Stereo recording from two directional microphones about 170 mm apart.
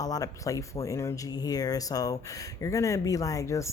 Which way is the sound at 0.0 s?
20° left (ahead or behind).